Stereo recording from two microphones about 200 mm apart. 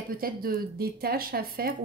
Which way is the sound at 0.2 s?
50° right (ahead or behind).